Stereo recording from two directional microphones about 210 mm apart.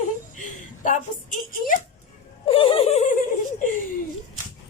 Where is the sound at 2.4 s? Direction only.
25° left (ahead or behind).